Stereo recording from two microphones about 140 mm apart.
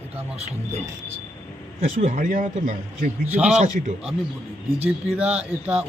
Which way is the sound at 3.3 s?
5° right (ahead or behind).